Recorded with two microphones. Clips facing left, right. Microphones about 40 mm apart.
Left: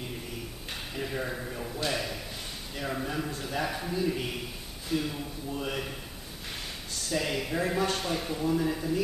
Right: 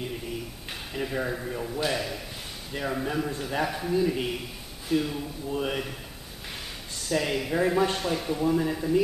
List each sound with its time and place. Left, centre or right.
0.7 s a man's voice: centre
5.5 s a man's voice: centre
7.1 s a man's voice: centre